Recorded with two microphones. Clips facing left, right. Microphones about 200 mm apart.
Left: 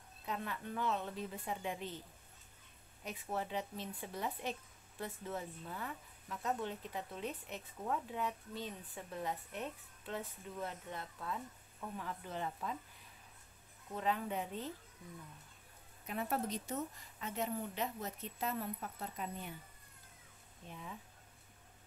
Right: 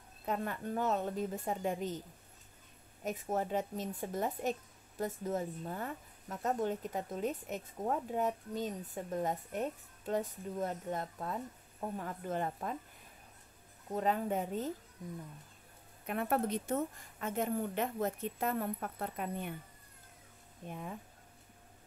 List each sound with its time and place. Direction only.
0.2 s speech: 45° right (ahead or behind)
13.8 s speech: 45° right (ahead or behind)
16.1 s speech: 60° right (ahead or behind)
20.6 s speech: 50° right (ahead or behind)